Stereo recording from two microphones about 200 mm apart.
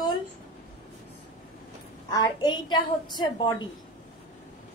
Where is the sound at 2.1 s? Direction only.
20° left (ahead or behind).